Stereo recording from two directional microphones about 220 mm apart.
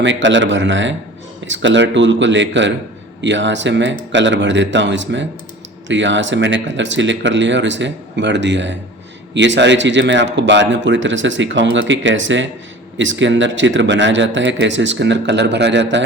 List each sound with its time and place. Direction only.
0.0 s a man's voice: 55° right (ahead or behind)